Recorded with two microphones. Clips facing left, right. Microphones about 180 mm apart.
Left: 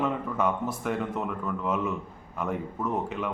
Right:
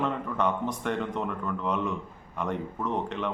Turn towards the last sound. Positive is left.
turn(degrees=5)  # may be behind; listen again after turning